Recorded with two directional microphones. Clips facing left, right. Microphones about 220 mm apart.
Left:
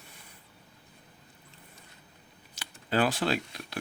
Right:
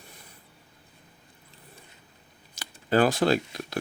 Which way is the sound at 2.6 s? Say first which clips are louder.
Right 5 dB; 45° right (ahead or behind).